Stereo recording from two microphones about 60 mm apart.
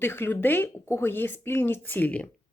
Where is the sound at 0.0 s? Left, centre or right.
Left.